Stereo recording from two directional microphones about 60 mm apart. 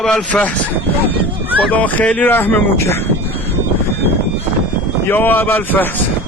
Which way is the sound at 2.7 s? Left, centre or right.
Left.